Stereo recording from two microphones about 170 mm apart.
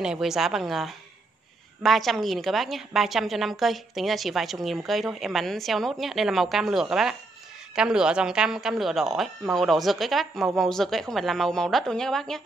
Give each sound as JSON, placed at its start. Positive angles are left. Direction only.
{"t": 0.0, "sound": "a woman's voice", "side_deg": -5}